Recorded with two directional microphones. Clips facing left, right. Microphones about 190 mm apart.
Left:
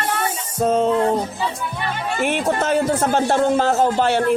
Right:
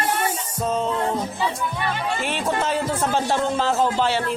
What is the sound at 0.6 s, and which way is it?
Speech, 60° left (ahead or behind).